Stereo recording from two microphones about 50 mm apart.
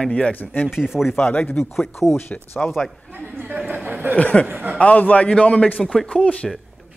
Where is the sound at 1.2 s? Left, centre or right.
Left.